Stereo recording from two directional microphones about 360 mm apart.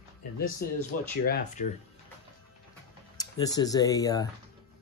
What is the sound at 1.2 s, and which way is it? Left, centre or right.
Speech, left.